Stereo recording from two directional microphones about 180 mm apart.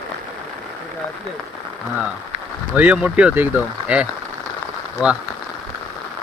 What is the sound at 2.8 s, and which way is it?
Speech, 10° right (ahead or behind).